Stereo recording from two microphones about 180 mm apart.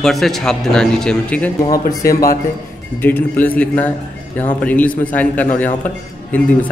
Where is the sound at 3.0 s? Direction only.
10° left (ahead or behind).